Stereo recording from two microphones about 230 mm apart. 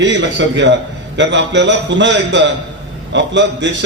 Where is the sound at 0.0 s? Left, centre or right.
Right.